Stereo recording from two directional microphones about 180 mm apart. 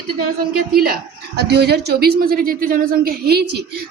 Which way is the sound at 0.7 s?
55° right (ahead or behind).